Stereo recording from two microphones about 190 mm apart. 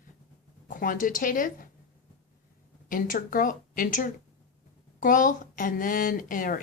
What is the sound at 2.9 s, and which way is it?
Speech, 45° left (ahead or behind).